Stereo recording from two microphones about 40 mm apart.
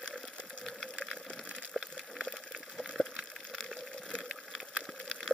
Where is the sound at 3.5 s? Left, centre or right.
Centre.